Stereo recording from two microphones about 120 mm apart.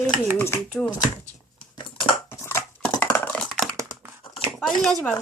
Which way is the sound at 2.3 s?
20° left (ahead or behind).